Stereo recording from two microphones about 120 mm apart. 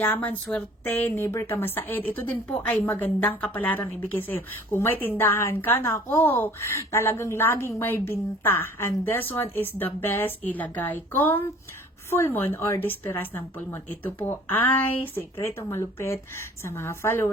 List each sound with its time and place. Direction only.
0.0 s a woman's voice: 15° left (ahead or behind)